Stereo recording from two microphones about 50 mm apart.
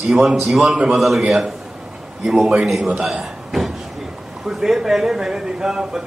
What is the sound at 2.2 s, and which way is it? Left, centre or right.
Speech, centre.